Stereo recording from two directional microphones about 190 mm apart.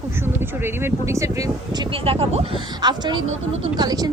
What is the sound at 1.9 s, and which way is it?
Speech, 30° right (ahead or behind).